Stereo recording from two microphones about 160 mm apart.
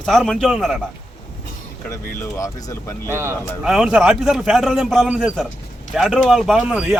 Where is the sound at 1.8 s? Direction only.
15° left (ahead or behind).